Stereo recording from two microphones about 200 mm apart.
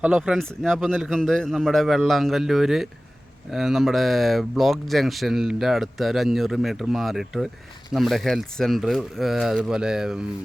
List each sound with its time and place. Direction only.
0.0 s speech: 5° right (ahead or behind)